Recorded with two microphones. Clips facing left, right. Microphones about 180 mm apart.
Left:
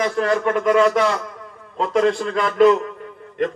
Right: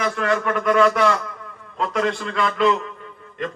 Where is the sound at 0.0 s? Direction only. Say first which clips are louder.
Left 3 dB; 30° left (ahead or behind).